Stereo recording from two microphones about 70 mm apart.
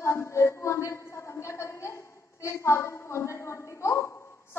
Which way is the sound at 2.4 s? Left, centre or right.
Left.